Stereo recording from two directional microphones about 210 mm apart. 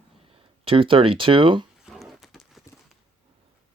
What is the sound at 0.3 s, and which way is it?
Speech, 25° right (ahead or behind).